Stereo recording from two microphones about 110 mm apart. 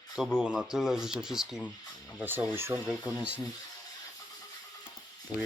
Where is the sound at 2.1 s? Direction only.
15° right (ahead or behind).